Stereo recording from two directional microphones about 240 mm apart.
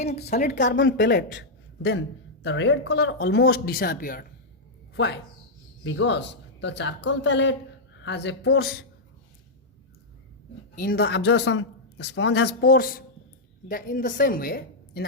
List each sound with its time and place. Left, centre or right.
0.3 s a woman's voice: left
0.7 s speech: left
10.8 s a woman's voice: left